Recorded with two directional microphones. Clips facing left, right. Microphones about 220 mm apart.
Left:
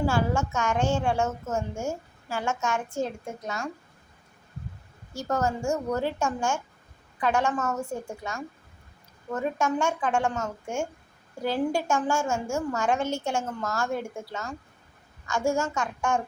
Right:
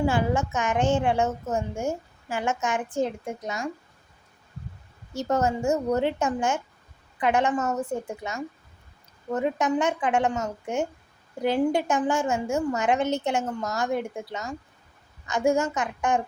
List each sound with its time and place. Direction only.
0.0 s a woman's voice: 15° right (ahead or behind)
5.1 s a woman's voice: 20° right (ahead or behind)